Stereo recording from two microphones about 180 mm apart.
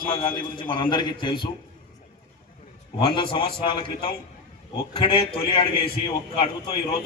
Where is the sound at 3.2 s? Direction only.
30° left (ahead or behind).